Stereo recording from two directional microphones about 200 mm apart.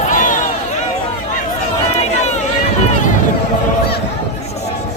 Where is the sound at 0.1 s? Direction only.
40° left (ahead or behind).